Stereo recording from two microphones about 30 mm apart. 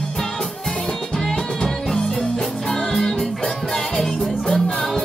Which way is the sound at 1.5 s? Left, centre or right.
Left.